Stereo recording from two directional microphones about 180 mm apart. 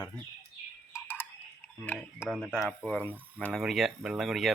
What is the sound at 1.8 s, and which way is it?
Speech, 10° left (ahead or behind).